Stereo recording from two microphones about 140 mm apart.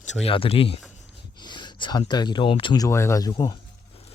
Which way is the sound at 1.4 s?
30° left (ahead or behind).